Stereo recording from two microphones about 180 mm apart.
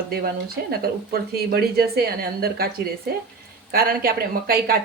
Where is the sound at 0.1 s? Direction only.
60° right (ahead or behind).